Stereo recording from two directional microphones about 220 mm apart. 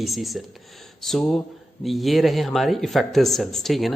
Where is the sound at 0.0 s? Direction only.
Centre (ahead or behind).